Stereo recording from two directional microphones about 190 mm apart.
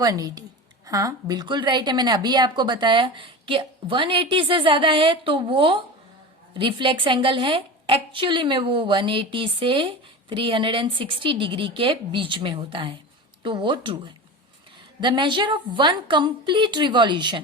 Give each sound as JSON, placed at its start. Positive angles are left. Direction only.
{"t": 0.0, "sound": "a woman's voice", "side_deg": -20}